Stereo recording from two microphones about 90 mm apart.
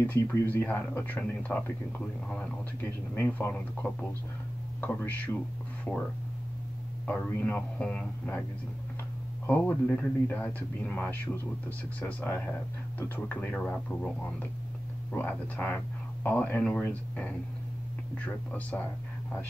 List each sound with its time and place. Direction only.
0.0 s a man's voice: 25° left (ahead or behind)
7.1 s a man's voice: 20° left (ahead or behind)
9.5 s a man's voice: 20° left (ahead or behind)